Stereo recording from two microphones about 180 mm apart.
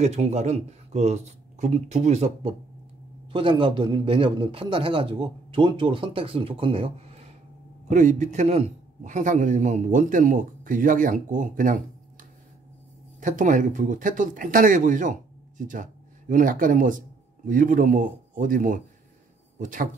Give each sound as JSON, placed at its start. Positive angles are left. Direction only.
{"t": 0.0, "sound": "a man's voice", "side_deg": -40}
{"t": 7.9, "sound": "a man's voice", "side_deg": -45}
{"t": 13.2, "sound": "a man's voice", "side_deg": -45}